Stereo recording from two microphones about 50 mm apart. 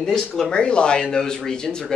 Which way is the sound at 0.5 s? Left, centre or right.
Centre.